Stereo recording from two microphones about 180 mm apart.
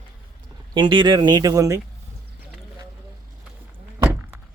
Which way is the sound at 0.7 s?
25° right (ahead or behind).